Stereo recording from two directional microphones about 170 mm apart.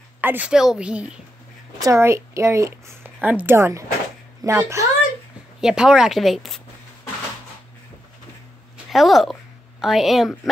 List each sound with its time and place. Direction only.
0.2 s speech: 10° right (ahead or behind)
1.8 s a woman's voice: 15° right (ahead or behind)
5.6 s speech: 5° right (ahead or behind)
8.9 s a woman's voice: centre (ahead or behind)